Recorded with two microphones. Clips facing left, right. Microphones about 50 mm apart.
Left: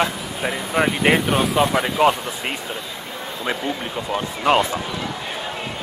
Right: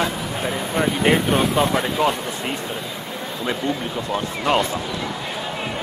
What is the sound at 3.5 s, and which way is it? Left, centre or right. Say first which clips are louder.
Speech: right 1 dB; centre.